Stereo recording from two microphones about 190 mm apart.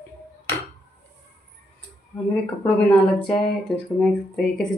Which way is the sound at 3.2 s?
5° left (ahead or behind).